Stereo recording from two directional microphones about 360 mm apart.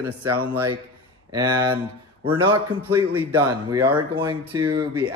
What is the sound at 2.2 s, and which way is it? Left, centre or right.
Speech, centre.